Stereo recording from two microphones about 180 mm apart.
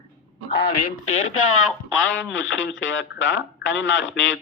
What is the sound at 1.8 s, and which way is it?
Speech, 90° left.